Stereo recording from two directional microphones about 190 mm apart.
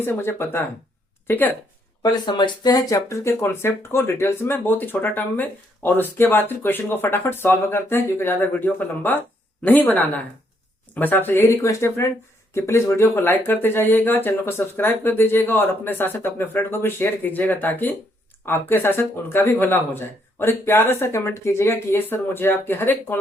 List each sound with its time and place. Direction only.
0.0 s speech: 10° left (ahead or behind)
2.0 s speech: 20° left (ahead or behind)